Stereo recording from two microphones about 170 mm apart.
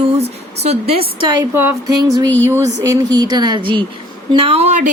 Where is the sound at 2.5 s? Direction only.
15° right (ahead or behind).